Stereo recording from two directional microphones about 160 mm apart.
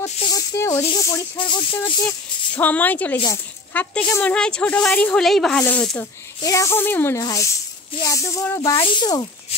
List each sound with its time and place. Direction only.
0.2 s speech: 25° left (ahead or behind)
1.4 s speech: 30° left (ahead or behind)
2.0 s speech: 10° left (ahead or behind)
6.4 s rub: 20° left (ahead or behind)
8.7 s rub: 30° left (ahead or behind)